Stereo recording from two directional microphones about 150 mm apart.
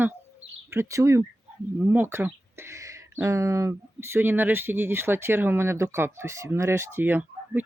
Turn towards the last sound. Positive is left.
turn(degrees=-10)  # may be behind; listen again after turning